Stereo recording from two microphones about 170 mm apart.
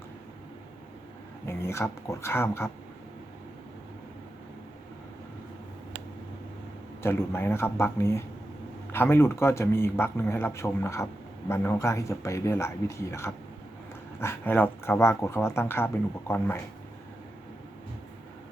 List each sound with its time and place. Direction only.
1.5 s speech: 15° left (ahead or behind)
7.0 s speech: 15° left (ahead or behind)